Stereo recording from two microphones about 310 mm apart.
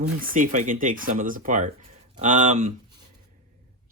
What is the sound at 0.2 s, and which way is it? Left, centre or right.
Speech, right.